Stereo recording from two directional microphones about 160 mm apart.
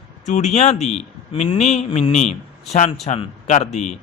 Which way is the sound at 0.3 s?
45° left (ahead or behind).